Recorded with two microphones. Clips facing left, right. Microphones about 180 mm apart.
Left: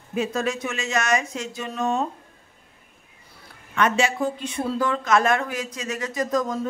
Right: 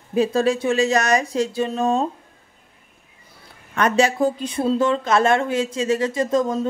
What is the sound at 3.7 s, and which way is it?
Speech, 40° right (ahead or behind).